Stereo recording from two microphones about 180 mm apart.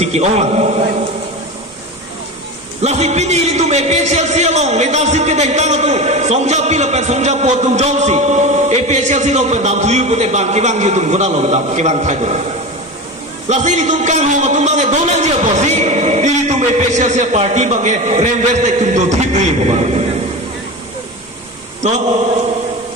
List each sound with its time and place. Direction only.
0.0 s a man's voice: 35° right (ahead or behind)
2.8 s a man's voice: 35° right (ahead or behind)
13.5 s a man's voice: 40° right (ahead or behind)